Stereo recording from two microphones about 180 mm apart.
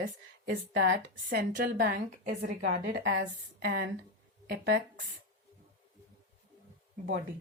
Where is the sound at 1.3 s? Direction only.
50° right (ahead or behind).